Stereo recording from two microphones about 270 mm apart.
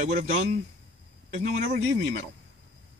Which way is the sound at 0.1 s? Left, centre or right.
Right.